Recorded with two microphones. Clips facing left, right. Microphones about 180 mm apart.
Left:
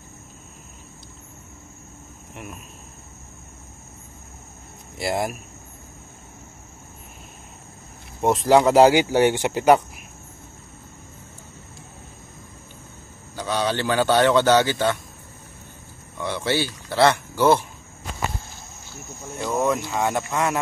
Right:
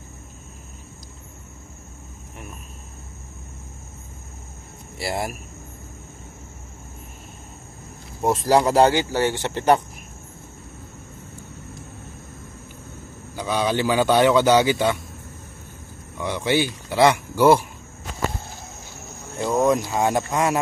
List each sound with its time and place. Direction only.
4.9 s speech: centre (ahead or behind)
8.2 s speech: centre (ahead or behind)
8.9 s speech: 15° left (ahead or behind)
13.4 s speech: 10° right (ahead or behind)
16.2 s speech: 15° right (ahead or behind)
19.4 s speech: 15° right (ahead or behind)